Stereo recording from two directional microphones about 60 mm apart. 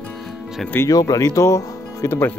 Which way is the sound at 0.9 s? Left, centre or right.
Left.